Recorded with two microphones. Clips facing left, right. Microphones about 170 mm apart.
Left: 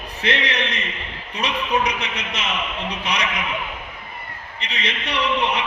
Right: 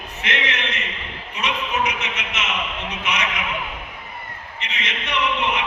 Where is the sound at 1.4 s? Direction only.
35° left (ahead or behind).